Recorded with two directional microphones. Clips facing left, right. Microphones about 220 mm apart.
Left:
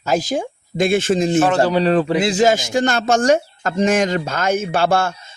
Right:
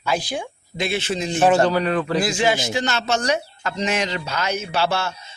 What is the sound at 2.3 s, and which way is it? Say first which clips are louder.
Speech: left 5 dB; 45° left (ahead or behind).